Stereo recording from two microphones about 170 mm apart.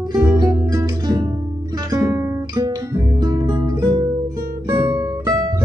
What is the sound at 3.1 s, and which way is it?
Music, 25° right (ahead or behind).